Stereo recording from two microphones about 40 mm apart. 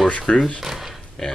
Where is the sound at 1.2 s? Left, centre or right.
Centre.